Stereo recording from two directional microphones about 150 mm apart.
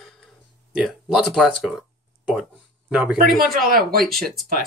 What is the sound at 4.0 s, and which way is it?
Speech, centre (ahead or behind).